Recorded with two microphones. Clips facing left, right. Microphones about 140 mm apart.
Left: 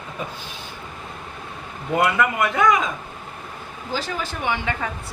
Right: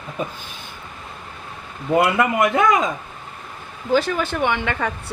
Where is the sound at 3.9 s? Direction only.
65° right (ahead or behind).